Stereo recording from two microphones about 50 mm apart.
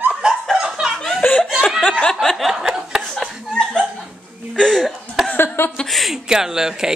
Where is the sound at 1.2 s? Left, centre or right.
Left.